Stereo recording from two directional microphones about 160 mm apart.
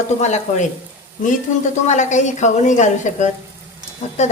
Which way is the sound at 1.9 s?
50° left (ahead or behind).